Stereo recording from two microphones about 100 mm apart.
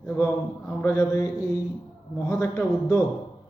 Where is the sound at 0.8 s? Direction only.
30° left (ahead or behind).